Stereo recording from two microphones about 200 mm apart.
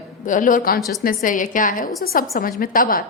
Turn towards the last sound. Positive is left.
turn(degrees=45)  # may be behind; listen again after turning